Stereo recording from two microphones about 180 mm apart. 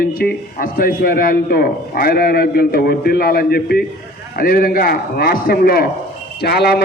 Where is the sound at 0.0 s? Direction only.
55° left (ahead or behind).